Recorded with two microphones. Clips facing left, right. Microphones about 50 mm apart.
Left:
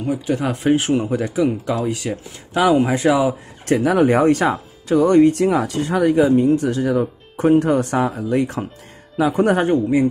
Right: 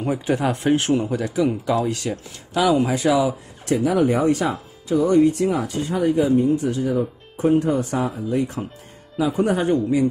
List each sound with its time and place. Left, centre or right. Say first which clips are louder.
0.0 s speech: left 1 dB; centre
0.4 s speech: left 2 dB; centre
0.9 s speech: left 2 dB; centre
2.5 s a man's voice: left 3 dB; left
3.6 s speech: left 3 dB; left
9.1 s speech: left 4 dB; left
9.6 s a man's voice: left 3 dB; left